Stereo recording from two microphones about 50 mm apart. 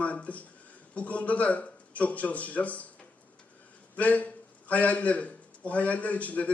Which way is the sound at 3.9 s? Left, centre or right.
Left.